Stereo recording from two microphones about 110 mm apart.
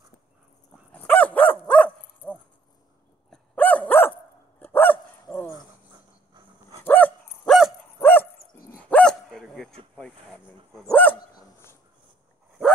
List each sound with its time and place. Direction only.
0.9 s dog: 15° left (ahead or behind)
3.5 s dog: 15° left (ahead or behind)
6.8 s dog: 20° left (ahead or behind)
7.4 s dog: centre (ahead or behind)
8.0 s dog: 15° left (ahead or behind); by 9.8 s centre (ahead or behind)
9.9 s speech: 10° left (ahead or behind)